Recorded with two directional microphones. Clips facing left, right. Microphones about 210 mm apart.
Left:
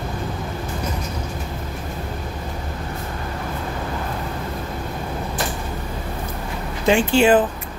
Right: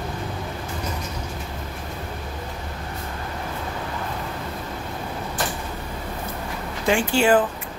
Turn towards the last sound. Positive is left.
turn(degrees=20)  # may be behind; listen again after turning